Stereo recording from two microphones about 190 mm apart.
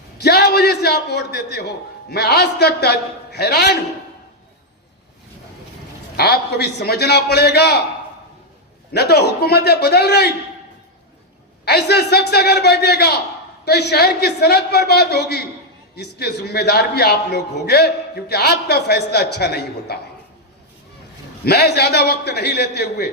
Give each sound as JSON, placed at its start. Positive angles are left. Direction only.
{"t": 0.2, "sound": "a man's voice", "side_deg": 60}
{"t": 6.1, "sound": "a man's voice", "side_deg": 55}
{"t": 8.9, "sound": "a man's voice", "side_deg": 60}
{"t": 11.6, "sound": "a man's voice", "side_deg": 60}
{"t": 21.4, "sound": "a man's voice", "side_deg": 60}